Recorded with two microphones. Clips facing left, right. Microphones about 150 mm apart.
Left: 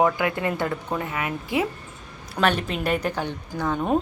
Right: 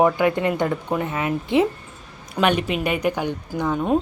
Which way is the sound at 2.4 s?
5° right (ahead or behind).